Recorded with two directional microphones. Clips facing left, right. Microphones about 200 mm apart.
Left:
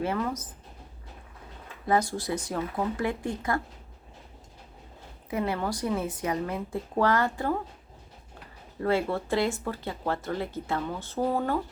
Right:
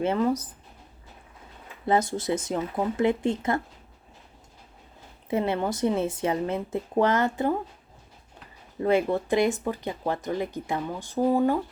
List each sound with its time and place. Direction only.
0.0 s speech: 20° right (ahead or behind)
1.9 s speech: 20° right (ahead or behind)
5.3 s speech: 25° right (ahead or behind)
8.8 s speech: 20° right (ahead or behind)